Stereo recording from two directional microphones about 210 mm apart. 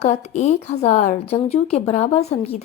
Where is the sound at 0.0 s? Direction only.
35° left (ahead or behind).